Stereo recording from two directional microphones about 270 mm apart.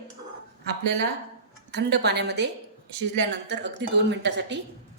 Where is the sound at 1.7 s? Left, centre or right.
Right.